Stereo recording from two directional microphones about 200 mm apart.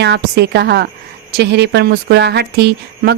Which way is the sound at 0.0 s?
55° right (ahead or behind).